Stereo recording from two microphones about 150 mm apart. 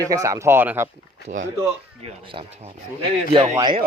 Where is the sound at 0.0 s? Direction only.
25° right (ahead or behind).